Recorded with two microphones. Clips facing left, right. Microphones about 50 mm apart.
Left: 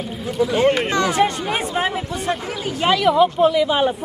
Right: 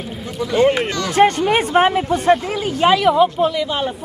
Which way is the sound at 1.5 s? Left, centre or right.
Right.